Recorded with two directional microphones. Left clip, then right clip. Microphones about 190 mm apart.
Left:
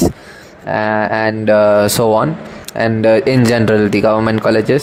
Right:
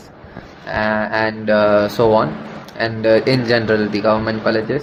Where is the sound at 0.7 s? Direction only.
45° left (ahead or behind).